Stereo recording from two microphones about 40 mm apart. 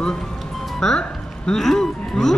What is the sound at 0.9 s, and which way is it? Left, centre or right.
Music, left.